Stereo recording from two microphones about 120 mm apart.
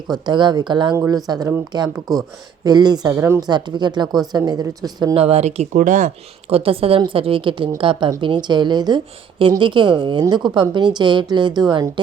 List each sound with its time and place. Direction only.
0.1 s a woman's voice: 40° right (ahead or behind)
0.9 s a woman's voice: 30° right (ahead or behind)
3.2 s speech: 20° right (ahead or behind)
3.4 s a woman's voice: 35° right (ahead or behind)
5.1 s speech: 60° right (ahead or behind); by 6.1 s 90° right
6.5 s a woman's voice: 50° right (ahead or behind); by 11.9 s 35° right (ahead or behind)